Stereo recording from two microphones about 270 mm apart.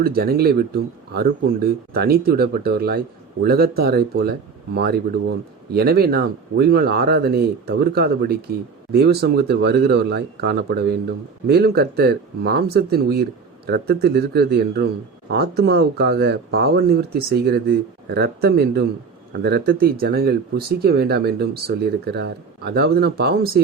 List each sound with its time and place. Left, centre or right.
0.0 s speech: right